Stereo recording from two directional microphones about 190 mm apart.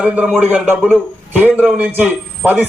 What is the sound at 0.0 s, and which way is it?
A man's voice, 5° right (ahead or behind).